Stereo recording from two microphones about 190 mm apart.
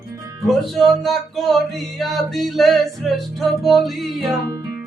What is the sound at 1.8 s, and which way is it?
Music, centre (ahead or behind).